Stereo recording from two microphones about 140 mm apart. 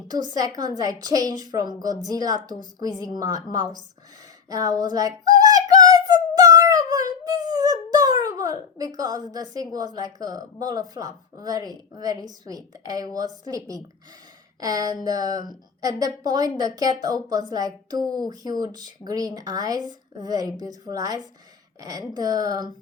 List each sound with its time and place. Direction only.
0.1 s a woman's voice: 30° right (ahead or behind)
4.4 s yodeling: 25° right (ahead or behind)
12.9 s a woman's voice: 25° right (ahead or behind)